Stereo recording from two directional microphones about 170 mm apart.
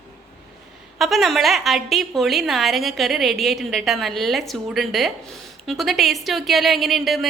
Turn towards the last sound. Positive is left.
turn(degrees=0)  # may be behind; listen again after turning